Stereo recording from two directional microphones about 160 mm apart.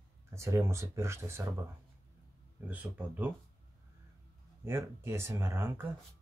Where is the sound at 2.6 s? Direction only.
10° right (ahead or behind).